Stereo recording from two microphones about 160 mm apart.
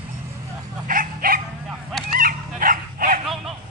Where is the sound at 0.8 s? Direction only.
60° right (ahead or behind).